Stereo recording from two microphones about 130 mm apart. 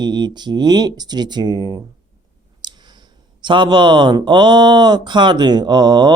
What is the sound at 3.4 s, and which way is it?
Speech, 35° right (ahead or behind).